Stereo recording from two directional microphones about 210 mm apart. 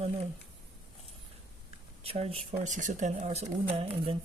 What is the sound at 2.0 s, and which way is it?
Speech, 25° right (ahead or behind).